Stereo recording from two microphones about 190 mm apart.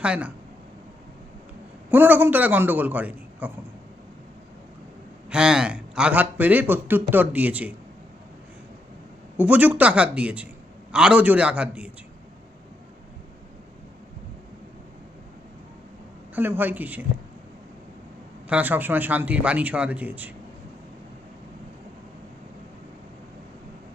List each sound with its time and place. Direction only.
0.0 s a man's voice: 5° right (ahead or behind)
1.9 s a man's voice: 10° right (ahead or behind)
5.3 s a man's voice: 5° right (ahead or behind)
9.4 s a man's voice: 10° right (ahead or behind)
16.3 s a man's voice: 10° right (ahead or behind)
18.4 s a man's voice: 10° right (ahead or behind)